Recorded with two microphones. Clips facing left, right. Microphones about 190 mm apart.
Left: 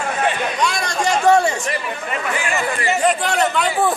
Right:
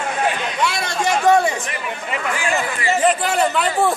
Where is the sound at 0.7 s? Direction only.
25° right (ahead or behind).